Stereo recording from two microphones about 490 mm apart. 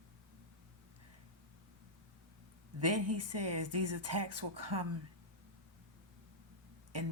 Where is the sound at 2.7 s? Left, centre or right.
Right.